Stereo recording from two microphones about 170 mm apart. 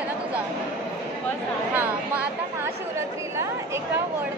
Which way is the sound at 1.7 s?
15° right (ahead or behind).